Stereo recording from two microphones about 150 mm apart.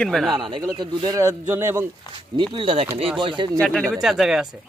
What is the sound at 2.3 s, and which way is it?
Speech, 30° right (ahead or behind).